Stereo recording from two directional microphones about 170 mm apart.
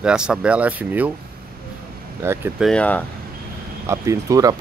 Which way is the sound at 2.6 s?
5° left (ahead or behind).